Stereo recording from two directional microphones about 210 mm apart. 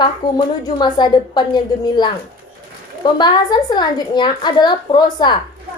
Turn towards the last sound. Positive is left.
turn(degrees=20)  # may be behind; listen again after turning